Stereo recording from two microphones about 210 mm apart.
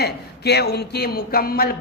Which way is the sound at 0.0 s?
50° left (ahead or behind).